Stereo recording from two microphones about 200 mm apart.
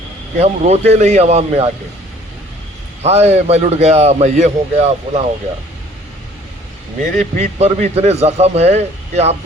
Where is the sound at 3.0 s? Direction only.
30° right (ahead or behind).